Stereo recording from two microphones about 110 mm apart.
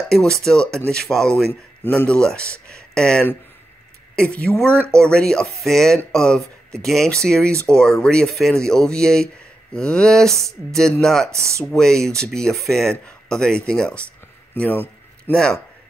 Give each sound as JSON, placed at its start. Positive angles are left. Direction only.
{"t": 0.1, "sound": "speech", "side_deg": 5}
{"t": 11.3, "sound": "speech", "side_deg": -25}
{"t": 11.6, "sound": "speech", "side_deg": 5}